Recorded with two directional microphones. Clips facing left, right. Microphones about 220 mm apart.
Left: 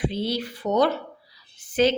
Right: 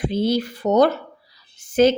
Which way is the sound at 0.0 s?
45° right (ahead or behind).